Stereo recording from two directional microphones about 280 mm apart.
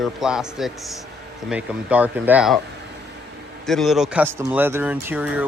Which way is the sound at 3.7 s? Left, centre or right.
Centre.